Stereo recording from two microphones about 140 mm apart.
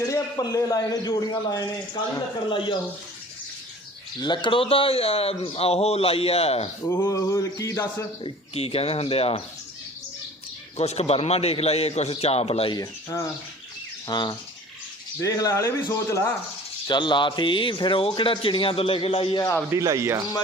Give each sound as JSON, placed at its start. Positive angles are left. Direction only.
{"t": 0.0, "sound": "a man's voice", "side_deg": 25}
{"t": 4.2, "sound": "speech", "side_deg": 30}
{"t": 7.1, "sound": "a man's voice", "side_deg": 25}
{"t": 8.2, "sound": "speech", "side_deg": 45}
{"t": 10.8, "sound": "speech", "side_deg": 50}
{"t": 12.7, "sound": "a man's voice", "side_deg": 25}
{"t": 16.8, "sound": "speech", "side_deg": 35}
{"t": 19.7, "sound": "speech", "side_deg": -20}